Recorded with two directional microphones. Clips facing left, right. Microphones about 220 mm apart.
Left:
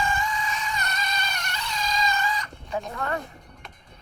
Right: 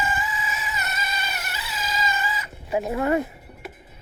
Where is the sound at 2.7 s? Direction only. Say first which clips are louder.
Right 7 dB; 20° right (ahead or behind).